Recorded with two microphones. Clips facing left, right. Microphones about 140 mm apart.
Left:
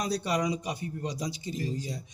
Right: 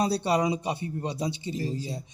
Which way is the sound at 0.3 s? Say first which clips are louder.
Right 4 dB; 30° right (ahead or behind).